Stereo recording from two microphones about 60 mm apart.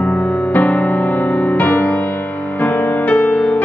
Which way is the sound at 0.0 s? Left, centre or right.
Left.